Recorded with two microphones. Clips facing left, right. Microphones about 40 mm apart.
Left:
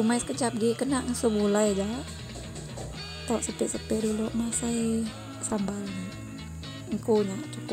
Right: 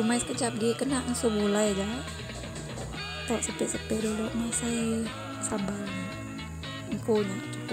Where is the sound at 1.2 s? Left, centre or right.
Right.